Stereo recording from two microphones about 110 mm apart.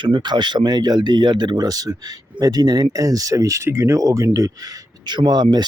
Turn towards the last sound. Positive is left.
turn(degrees=-40)  # may be behind; listen again after turning